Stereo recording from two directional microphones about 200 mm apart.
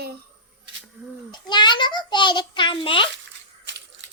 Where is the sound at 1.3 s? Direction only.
20° left (ahead or behind).